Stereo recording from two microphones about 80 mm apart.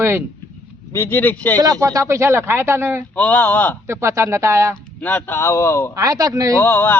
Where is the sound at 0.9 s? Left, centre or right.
Left.